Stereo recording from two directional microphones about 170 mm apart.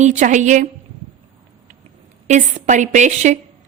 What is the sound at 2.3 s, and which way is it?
A woman's voice, 45° right (ahead or behind).